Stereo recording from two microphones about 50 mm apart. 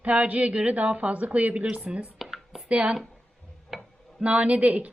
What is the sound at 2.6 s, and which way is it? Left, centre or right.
Speech, right.